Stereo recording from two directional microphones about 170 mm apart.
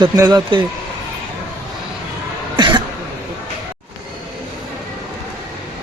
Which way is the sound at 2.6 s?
25° right (ahead or behind).